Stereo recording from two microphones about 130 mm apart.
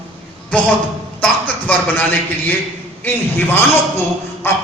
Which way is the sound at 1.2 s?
10° left (ahead or behind).